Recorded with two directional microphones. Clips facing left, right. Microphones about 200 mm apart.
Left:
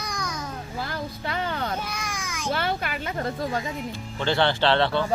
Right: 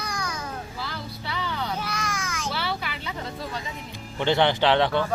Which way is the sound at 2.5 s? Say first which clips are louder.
Left 8 dB; 50° left (ahead or behind).